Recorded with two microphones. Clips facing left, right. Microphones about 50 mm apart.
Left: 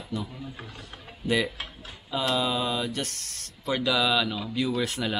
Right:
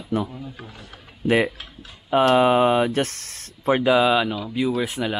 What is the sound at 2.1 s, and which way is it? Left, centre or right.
Speech, right.